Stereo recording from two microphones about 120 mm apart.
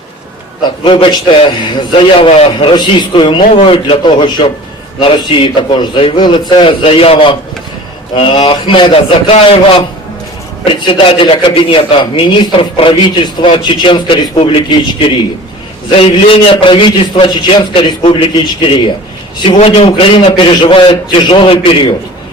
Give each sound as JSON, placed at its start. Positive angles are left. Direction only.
{"t": 0.9, "sound": "a man's voice", "side_deg": 45}
{"t": 2.1, "sound": "a man's voice", "side_deg": 55}
{"t": 3.5, "sound": "a man's voice", "side_deg": 55}
{"t": 15.9, "sound": "a man's voice", "side_deg": 50}